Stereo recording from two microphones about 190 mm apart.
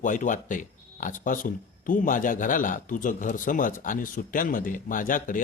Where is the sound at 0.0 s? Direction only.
40° left (ahead or behind).